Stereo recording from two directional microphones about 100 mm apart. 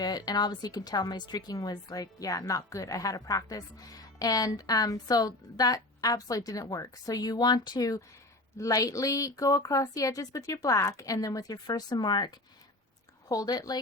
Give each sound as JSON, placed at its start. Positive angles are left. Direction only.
{"t": 0.0, "sound": "a woman's voice", "side_deg": 40}